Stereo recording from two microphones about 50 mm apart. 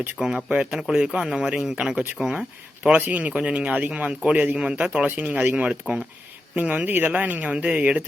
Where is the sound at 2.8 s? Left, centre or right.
Right.